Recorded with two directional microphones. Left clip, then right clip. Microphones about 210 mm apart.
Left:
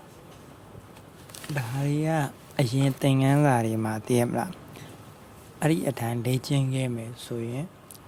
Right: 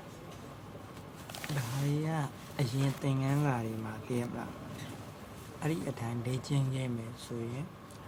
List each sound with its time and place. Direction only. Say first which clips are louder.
1.5 s speech: left 8 dB; 40° left (ahead or behind)
5.5 s speech: left 11 dB; 45° left (ahead or behind)